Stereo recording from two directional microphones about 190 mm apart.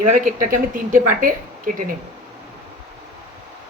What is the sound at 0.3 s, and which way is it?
A woman's voice, 45° right (ahead or behind).